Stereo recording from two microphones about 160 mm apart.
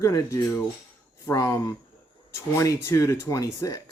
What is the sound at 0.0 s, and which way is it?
Speech, 20° left (ahead or behind).